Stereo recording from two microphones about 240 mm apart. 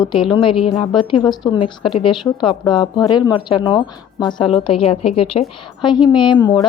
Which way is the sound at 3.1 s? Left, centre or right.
Centre.